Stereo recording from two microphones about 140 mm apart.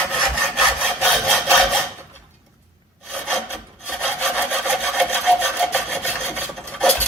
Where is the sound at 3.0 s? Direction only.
5° left (ahead or behind).